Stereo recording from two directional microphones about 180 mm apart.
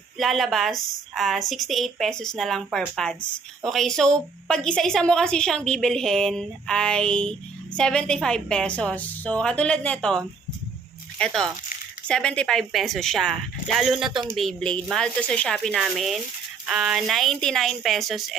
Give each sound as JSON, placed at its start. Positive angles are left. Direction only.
{"t": 0.2, "sound": "a woman's voice", "side_deg": 0}
{"t": 14.1, "sound": "speech", "side_deg": -25}
{"t": 14.3, "sound": "a woman's voice", "side_deg": 5}